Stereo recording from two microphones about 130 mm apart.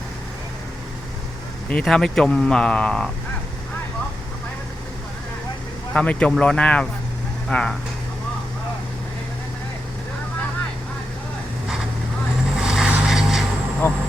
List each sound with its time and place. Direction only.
1.7 s speech: 5° left (ahead or behind)
5.9 s speech: 10° left (ahead or behind)
12.5 s vehicle: 5° right (ahead or behind)
13.8 s speech: 20° left (ahead or behind)